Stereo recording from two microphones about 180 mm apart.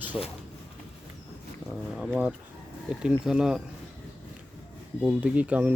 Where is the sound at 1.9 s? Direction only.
5° right (ahead or behind).